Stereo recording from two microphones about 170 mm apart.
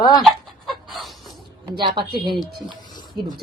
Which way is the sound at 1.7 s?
25° right (ahead or behind).